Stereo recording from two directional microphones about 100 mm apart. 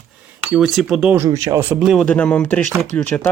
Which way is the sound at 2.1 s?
15° left (ahead or behind).